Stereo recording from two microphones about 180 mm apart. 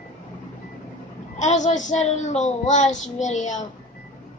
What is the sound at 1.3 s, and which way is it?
A woman's voice, 40° left (ahead or behind).